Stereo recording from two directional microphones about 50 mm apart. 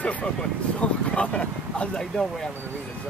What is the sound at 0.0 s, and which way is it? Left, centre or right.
Speech, left.